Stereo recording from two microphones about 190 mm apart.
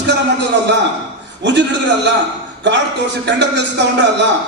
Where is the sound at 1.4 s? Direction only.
70° right (ahead or behind).